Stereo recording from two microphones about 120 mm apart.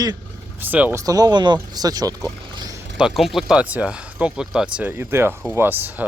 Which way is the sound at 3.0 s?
Centre (ahead or behind).